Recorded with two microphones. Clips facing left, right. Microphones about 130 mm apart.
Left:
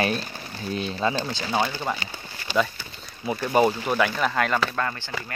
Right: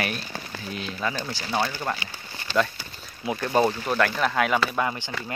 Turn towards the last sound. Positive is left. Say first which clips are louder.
# right 1 dB
turn(degrees=-15)  # may be behind; listen again after turning